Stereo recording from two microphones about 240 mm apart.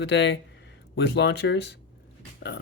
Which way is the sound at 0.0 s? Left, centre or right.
Left.